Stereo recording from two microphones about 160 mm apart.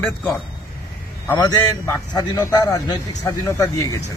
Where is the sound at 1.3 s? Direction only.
25° left (ahead or behind).